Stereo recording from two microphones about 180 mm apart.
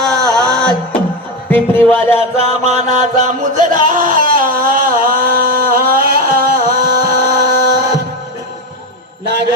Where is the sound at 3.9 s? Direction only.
45° right (ahead or behind).